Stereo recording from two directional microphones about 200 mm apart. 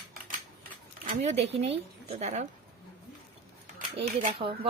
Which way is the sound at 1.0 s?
35° right (ahead or behind).